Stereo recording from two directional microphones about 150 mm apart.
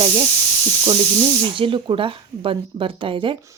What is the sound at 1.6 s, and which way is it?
A woman's voice, 35° right (ahead or behind).